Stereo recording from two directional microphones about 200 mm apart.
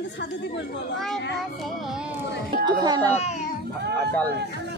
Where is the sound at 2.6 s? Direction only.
20° right (ahead or behind).